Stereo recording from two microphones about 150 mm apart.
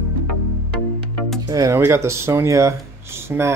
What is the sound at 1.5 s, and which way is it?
Speech, 20° right (ahead or behind).